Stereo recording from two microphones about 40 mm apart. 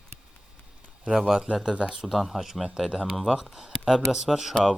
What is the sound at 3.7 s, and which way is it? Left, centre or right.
Speech, centre.